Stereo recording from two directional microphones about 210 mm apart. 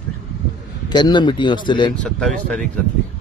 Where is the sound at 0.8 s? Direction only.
20° left (ahead or behind).